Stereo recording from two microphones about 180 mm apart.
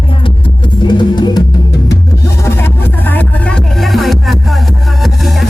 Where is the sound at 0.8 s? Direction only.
25° left (ahead or behind).